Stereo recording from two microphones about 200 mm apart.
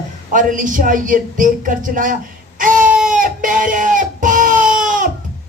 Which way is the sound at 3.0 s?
40° right (ahead or behind).